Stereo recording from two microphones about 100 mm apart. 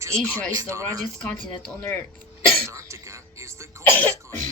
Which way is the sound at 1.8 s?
20° left (ahead or behind).